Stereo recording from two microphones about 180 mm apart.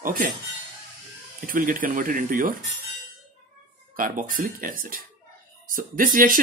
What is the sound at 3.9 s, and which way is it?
Speech, 50° right (ahead or behind).